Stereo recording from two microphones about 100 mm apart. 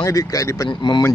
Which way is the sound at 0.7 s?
50° left (ahead or behind).